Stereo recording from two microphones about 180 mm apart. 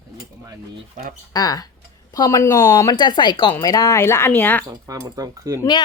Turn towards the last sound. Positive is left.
turn(degrees=-20)  # may be behind; listen again after turning